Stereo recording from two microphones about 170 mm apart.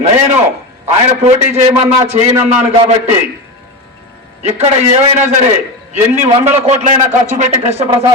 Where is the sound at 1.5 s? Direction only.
40° right (ahead or behind).